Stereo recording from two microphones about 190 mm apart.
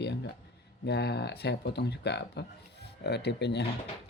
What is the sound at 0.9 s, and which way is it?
Speech, 60° left (ahead or behind).